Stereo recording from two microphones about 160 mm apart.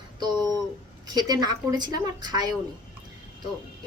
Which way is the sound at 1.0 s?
25° right (ahead or behind).